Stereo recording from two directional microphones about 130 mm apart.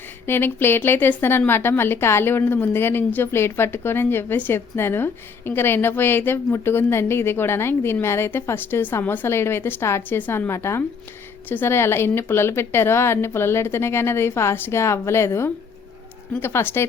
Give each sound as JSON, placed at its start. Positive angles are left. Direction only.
{"t": 0.3, "sound": "a woman's voice", "side_deg": 15}